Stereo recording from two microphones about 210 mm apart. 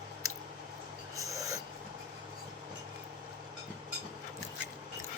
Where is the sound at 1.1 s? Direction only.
15° right (ahead or behind).